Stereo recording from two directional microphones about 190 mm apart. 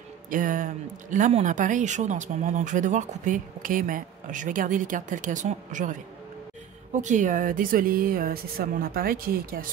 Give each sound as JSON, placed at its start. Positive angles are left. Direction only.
{"t": 0.3, "sound": "speech", "side_deg": -45}